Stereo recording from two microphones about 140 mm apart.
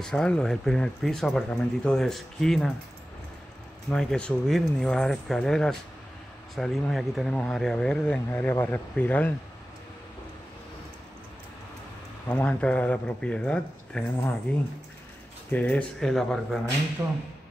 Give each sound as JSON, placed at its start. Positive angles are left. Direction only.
{"t": 0.0, "sound": "speech", "side_deg": 5}
{"t": 3.9, "sound": "speech", "side_deg": 5}
{"t": 12.3, "sound": "speech", "side_deg": 10}
{"t": 15.5, "sound": "speech", "side_deg": 10}
{"t": 17.0, "sound": "speech", "side_deg": -20}